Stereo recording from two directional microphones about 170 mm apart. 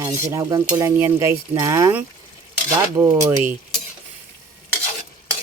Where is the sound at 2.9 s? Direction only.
20° right (ahead or behind).